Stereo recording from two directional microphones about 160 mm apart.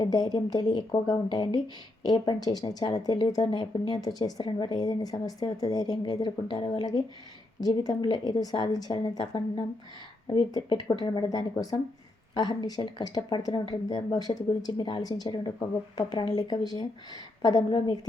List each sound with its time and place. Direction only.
0.0 s speech: 25° left (ahead or behind)